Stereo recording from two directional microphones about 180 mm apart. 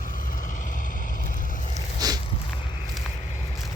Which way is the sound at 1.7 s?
20° right (ahead or behind).